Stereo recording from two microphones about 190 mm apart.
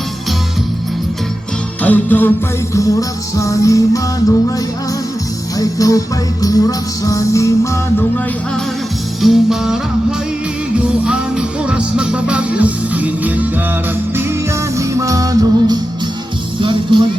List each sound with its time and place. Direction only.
1.8 s music: 10° left (ahead or behind)
5.5 s music: 20° left (ahead or behind)
9.2 s music: centre (ahead or behind)
14.8 s music: 15° right (ahead or behind)